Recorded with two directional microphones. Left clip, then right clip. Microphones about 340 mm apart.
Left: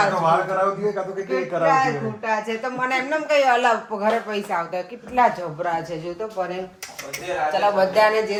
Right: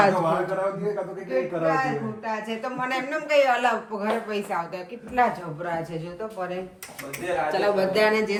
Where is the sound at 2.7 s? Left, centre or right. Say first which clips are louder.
Left 5 dB; centre.